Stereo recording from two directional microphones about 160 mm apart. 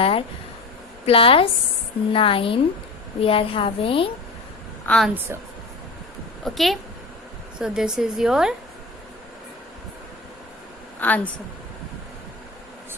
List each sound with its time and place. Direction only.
0.0 s a woman's voice: 35° left (ahead or behind)
4.9 s a woman's voice: centre (ahead or behind)
6.4 s a woman's voice: centre (ahead or behind)
11.0 s a woman's voice: 10° left (ahead or behind)